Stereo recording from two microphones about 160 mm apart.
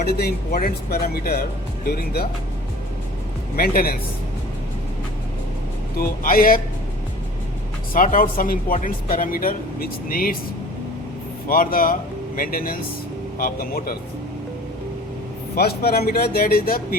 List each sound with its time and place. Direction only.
0.0 s speech: 75° left (ahead or behind)
3.5 s speech: 65° left (ahead or behind)
6.0 s speech: 65° left (ahead or behind)
7.9 s speech: 60° left (ahead or behind)
11.4 s speech: 60° left (ahead or behind)
15.5 s speech: 75° left (ahead or behind)